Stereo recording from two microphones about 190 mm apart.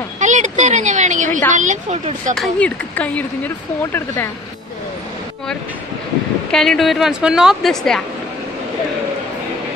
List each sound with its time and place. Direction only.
0.2 s a sound: 40° right (ahead or behind)
1.5 s speech: 40° right (ahead or behind)
2.3 s speech: 5° left (ahead or behind)
6.5 s a woman's voice: centre (ahead or behind)